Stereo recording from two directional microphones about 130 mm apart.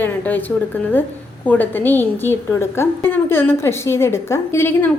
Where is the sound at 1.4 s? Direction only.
15° left (ahead or behind).